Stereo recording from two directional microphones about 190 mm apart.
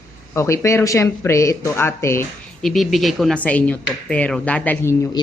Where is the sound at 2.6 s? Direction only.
Centre (ahead or behind).